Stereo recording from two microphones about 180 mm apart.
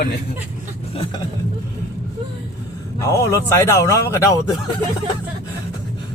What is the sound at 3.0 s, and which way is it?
Speech, 15° left (ahead or behind).